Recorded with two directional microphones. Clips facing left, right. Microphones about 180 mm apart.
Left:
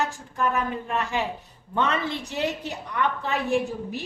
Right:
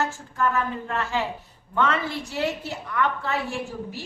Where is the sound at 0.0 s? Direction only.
15° left (ahead or behind).